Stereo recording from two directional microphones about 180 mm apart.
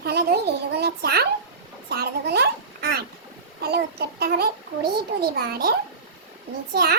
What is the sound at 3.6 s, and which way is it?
A child's voice, 60° right (ahead or behind).